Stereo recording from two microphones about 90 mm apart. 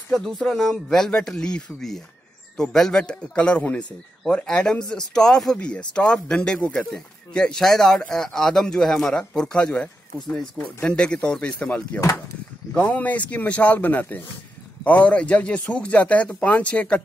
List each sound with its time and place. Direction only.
0.1 s speech: 5° left (ahead or behind)